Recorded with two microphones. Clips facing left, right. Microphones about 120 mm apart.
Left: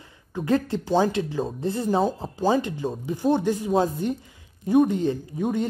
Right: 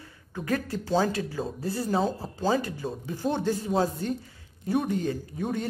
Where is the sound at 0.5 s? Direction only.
25° left (ahead or behind).